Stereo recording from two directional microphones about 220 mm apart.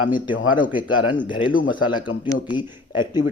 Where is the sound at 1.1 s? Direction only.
20° left (ahead or behind).